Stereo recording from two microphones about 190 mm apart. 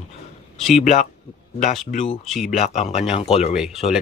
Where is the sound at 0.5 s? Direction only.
Centre (ahead or behind).